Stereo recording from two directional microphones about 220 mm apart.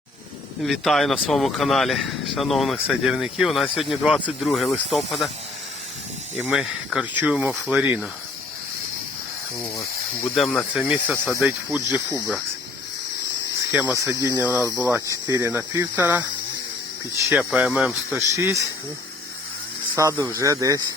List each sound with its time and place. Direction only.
0.6 s speech: centre (ahead or behind)
6.5 s speech: 5° right (ahead or behind)
10.3 s speech: centre (ahead or behind)
13.7 s speech: 5° right (ahead or behind)
17.2 s speech: 5° right (ahead or behind)
20.0 s speech: 15° right (ahead or behind)